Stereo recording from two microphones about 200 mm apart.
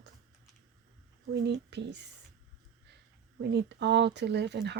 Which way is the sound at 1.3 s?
60° right (ahead or behind).